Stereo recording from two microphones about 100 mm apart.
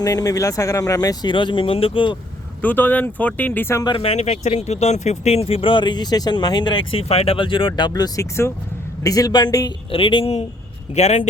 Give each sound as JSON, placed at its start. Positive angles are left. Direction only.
{"t": 0.0, "sound": "speech", "side_deg": 35}
{"t": 1.3, "sound": "speech", "side_deg": 50}
{"t": 2.6, "sound": "speech", "side_deg": 20}
{"t": 3.8, "sound": "speech", "side_deg": 65}
{"t": 7.1, "sound": "speech", "side_deg": 85}
{"t": 9.9, "sound": "speech", "side_deg": 60}